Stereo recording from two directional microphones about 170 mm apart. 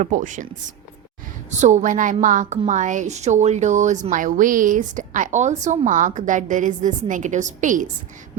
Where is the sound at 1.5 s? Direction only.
45° right (ahead or behind).